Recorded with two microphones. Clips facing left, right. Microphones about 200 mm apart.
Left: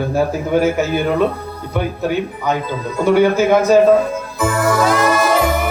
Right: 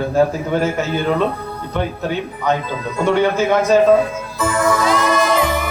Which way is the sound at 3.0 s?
10° left (ahead or behind).